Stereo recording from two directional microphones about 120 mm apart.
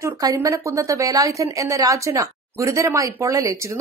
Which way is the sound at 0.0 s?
30° right (ahead or behind).